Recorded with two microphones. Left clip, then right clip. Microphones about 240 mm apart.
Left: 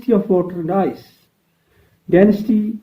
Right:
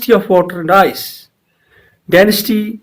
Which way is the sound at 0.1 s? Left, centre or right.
Centre.